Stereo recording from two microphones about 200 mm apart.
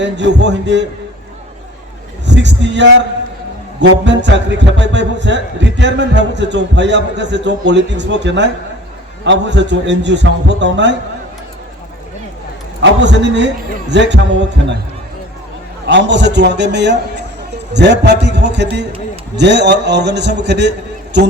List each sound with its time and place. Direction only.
0.0 s a man's voice: 60° right (ahead or behind)
2.2 s a man's voice: 60° right (ahead or behind)
12.8 s a man's voice: 60° right (ahead or behind)
15.9 s a man's voice: 60° right (ahead or behind)